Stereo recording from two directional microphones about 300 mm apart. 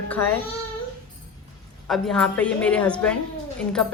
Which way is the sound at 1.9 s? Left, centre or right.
Centre.